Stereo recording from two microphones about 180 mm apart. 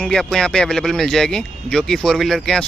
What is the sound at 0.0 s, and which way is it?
Speech, 5° left (ahead or behind).